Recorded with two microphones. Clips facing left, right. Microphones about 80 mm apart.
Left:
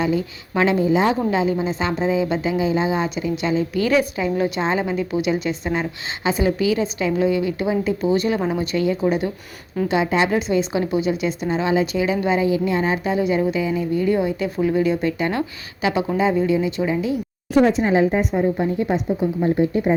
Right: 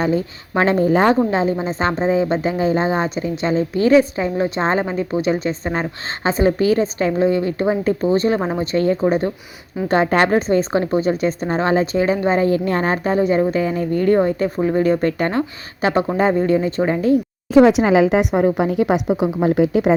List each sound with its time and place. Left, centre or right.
0.0 s speech: right
1.3 s speech: right
9.9 s a woman's voice: right
15.3 s speech: right
17.6 s a woman's voice: right